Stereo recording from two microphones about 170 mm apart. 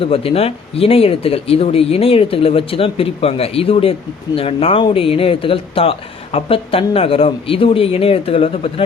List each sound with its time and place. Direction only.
0.0 s speech: 35° left (ahead or behind)